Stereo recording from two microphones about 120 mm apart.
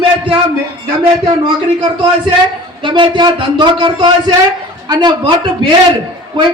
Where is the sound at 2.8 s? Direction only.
40° right (ahead or behind).